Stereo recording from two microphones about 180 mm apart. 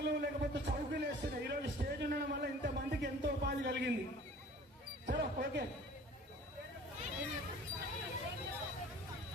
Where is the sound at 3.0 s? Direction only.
75° right (ahead or behind).